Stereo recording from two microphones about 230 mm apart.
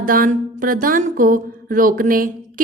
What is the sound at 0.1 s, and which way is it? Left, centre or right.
Speech, right.